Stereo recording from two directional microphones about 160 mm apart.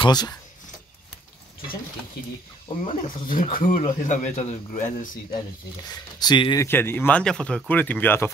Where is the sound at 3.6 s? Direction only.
50° left (ahead or behind).